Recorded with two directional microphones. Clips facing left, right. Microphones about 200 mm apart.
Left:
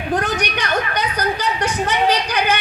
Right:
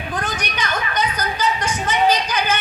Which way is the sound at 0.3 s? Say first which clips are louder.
Left 4 dB; 60° left (ahead or behind).